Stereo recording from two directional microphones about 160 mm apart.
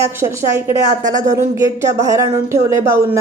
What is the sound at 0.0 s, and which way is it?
Speech, 20° right (ahead or behind).